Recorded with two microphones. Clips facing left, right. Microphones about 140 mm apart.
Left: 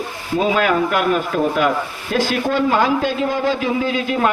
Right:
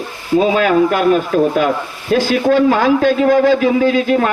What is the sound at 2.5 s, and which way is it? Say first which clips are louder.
A man's voice: right 6 dB; 50° right (ahead or behind).